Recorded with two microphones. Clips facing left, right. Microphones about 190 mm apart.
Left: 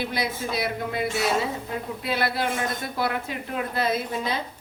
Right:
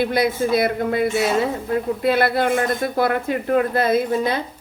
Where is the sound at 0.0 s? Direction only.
55° right (ahead or behind).